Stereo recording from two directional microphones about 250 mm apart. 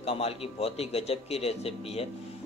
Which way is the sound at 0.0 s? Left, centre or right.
Left.